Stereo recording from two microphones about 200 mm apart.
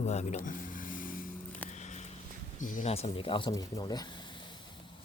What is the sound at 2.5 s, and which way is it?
Speech, 40° left (ahead or behind).